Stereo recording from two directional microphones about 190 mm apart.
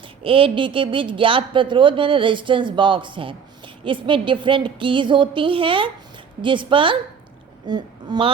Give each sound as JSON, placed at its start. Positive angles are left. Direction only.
{"t": 0.2, "sound": "speech", "side_deg": -30}